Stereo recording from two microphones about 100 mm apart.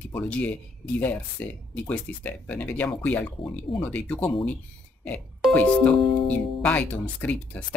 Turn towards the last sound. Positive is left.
turn(degrees=15)  # may be behind; listen again after turning